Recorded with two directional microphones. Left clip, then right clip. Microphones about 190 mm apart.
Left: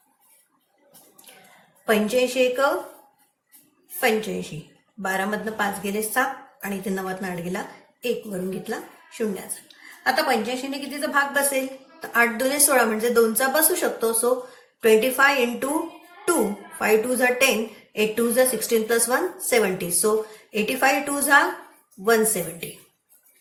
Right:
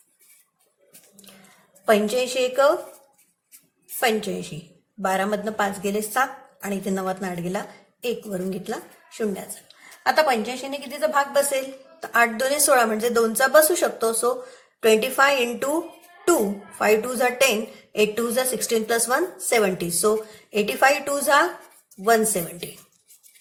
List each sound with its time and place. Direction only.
1.9 s a woman's voice: 55° right (ahead or behind)
4.0 s a woman's voice: 55° right (ahead or behind)